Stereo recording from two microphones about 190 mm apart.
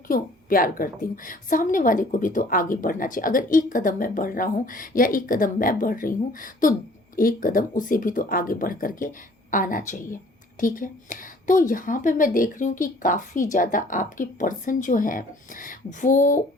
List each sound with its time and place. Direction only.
0.1 s a woman's voice: 50° left (ahead or behind)